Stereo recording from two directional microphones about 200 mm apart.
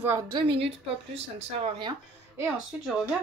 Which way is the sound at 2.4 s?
5° right (ahead or behind).